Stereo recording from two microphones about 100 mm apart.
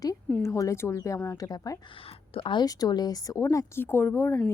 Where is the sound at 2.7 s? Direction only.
40° left (ahead or behind); by 4.4 s 25° left (ahead or behind).